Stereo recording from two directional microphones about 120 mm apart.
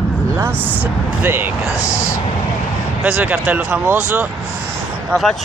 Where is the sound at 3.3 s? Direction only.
5° right (ahead or behind).